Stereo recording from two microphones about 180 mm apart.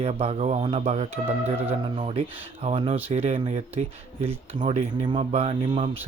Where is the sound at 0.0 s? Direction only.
35° right (ahead or behind).